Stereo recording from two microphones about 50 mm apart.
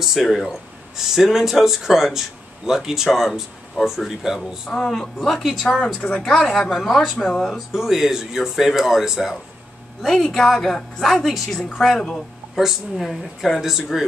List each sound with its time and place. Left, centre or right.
0.0 s speech: centre
4.4 s a woman's voice: centre
5.9 s speech: left
6.7 s speech: centre
10.0 s a woman's voice: centre
12.5 s speech: centre